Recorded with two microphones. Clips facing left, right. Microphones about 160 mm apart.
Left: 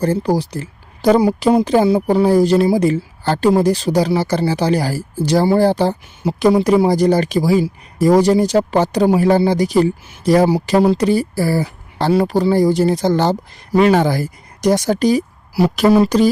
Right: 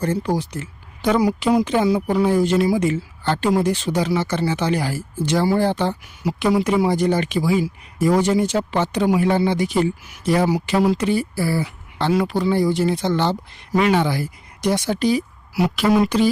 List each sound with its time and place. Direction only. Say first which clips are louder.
0.0 s speech: left 5 dB; 35° left (ahead or behind)